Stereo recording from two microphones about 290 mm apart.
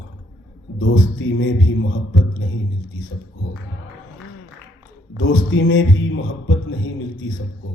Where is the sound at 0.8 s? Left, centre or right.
Left.